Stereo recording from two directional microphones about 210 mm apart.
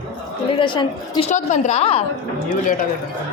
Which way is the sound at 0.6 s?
20° left (ahead or behind).